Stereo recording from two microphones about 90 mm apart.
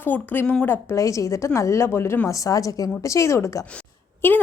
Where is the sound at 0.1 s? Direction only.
15° left (ahead or behind).